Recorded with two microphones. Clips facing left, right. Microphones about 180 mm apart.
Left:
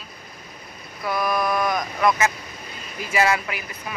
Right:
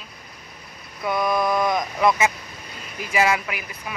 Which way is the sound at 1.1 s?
20° right (ahead or behind).